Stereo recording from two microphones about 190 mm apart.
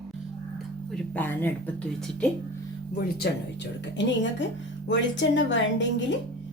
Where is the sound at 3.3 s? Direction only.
55° left (ahead or behind).